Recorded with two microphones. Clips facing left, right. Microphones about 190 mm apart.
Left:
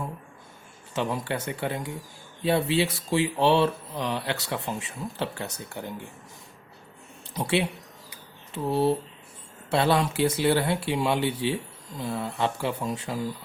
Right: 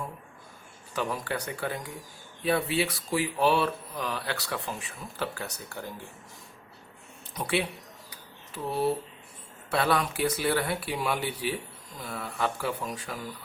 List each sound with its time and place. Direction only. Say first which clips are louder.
0.9 s speech: left 3 dB; 25° left (ahead or behind)
7.3 s speech: left 3 dB; 25° left (ahead or behind)
8.1 s a sound: left 5 dB; 25° left (ahead or behind)
9.6 s speech: left 3 dB; 25° left (ahead or behind)